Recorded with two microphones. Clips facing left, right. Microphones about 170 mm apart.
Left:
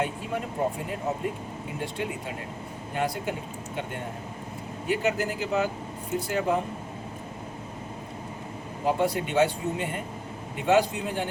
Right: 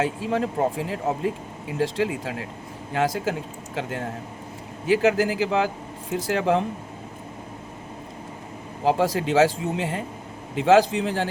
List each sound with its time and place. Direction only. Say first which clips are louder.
0.0 s speech: right 6 dB; 90° right
8.8 s speech: right 4 dB; 90° right